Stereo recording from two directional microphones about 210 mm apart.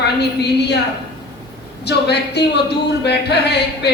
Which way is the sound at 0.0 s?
50° left (ahead or behind).